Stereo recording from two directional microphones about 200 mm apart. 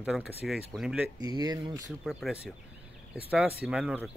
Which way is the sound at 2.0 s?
Centre (ahead or behind).